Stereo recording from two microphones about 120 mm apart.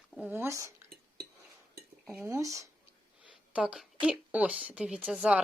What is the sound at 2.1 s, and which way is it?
Speech, 20° right (ahead or behind).